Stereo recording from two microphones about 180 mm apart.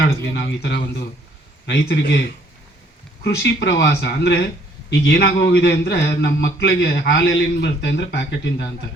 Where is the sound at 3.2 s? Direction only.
65° left (ahead or behind).